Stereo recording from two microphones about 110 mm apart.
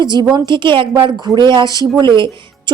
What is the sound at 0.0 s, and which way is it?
A woman's voice, 40° right (ahead or behind).